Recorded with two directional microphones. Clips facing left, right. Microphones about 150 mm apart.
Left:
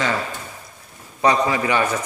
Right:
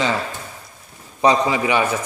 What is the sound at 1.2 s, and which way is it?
Speech, 20° right (ahead or behind).